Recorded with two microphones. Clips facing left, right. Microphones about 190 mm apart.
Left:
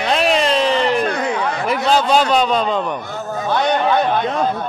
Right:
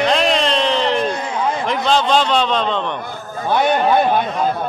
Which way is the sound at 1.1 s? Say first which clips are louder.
Left 2 dB; 70° left (ahead or behind).